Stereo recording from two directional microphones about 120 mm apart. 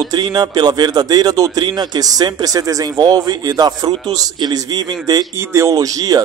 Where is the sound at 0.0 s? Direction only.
35° right (ahead or behind).